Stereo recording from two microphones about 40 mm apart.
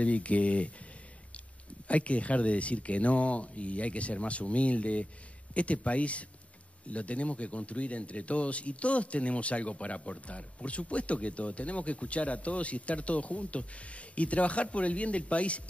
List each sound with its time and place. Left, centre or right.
0.0 s speech: left
1.9 s speech: left